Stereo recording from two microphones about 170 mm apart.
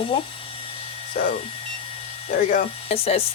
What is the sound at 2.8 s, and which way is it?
Speech, 35° left (ahead or behind).